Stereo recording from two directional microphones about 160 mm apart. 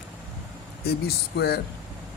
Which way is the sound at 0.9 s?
85° left.